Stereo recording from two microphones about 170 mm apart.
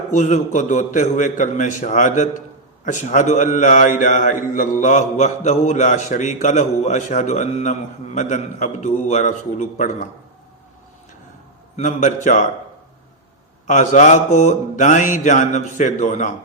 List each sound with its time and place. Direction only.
0.1 s a man's voice: 45° left (ahead or behind)
11.8 s a man's voice: 50° left (ahead or behind)
13.7 s a man's voice: 45° left (ahead or behind)